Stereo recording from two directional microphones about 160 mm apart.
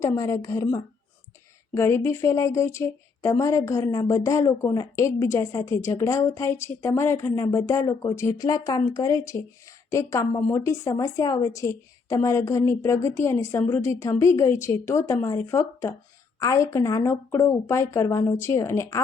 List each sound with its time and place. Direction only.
0.0 s a woman's voice: 20° left (ahead or behind)